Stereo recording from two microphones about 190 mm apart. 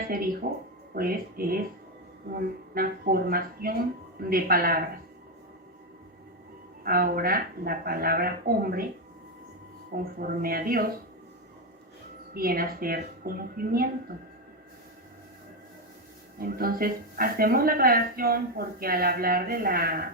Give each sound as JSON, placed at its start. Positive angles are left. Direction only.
{"t": 0.9, "sound": "speech", "side_deg": -50}
{"t": 6.8, "sound": "speech", "side_deg": -50}
{"t": 9.9, "sound": "speech", "side_deg": -50}
{"t": 12.3, "sound": "speech", "side_deg": -50}
{"t": 16.4, "sound": "speech", "side_deg": -50}